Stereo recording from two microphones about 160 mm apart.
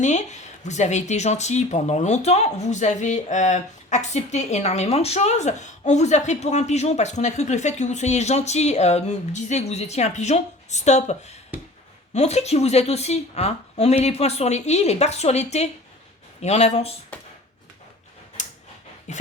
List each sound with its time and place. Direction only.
0.0 s speech: 50° left (ahead or behind)
18.4 s a sound: 45° left (ahead or behind)
19.1 s speech: 50° left (ahead or behind)